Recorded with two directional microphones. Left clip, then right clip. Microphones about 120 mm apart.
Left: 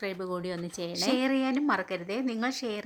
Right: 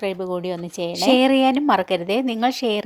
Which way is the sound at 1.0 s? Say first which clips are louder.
Right 12 dB; 50° right (ahead or behind).